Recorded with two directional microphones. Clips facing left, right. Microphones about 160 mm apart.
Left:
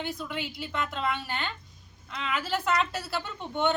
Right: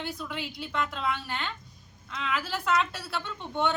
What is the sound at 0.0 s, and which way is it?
Speech, centre (ahead or behind).